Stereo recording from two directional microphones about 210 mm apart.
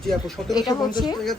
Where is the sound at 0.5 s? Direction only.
20° left (ahead or behind).